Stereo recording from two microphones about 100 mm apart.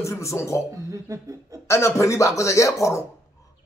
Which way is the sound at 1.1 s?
30° right (ahead or behind).